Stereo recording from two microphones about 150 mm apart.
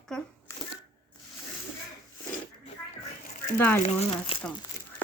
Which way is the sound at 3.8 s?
45° left (ahead or behind).